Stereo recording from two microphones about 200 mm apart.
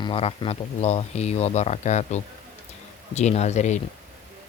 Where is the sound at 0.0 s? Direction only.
30° left (ahead or behind).